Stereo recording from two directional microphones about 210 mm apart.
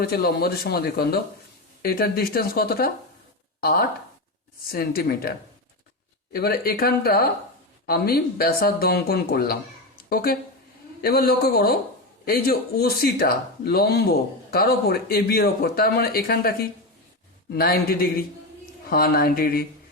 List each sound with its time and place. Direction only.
0.0 s a man's voice: 45° left (ahead or behind)
6.3 s a man's voice: 45° left (ahead or behind)